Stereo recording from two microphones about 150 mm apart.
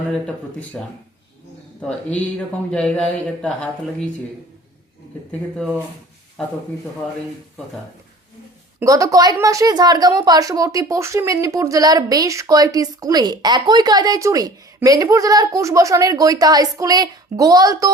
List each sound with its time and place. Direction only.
0.7 s speech: 10° left (ahead or behind)
2.7 s speech: 5° left (ahead or behind)
5.3 s speech: 5° left (ahead or behind)
8.8 s a woman's voice: 20° right (ahead or behind)